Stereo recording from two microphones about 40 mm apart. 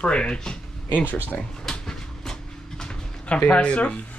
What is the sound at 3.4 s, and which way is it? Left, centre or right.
Speech, left.